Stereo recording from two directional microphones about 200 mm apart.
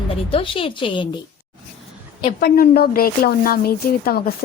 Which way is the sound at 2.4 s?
50° left (ahead or behind).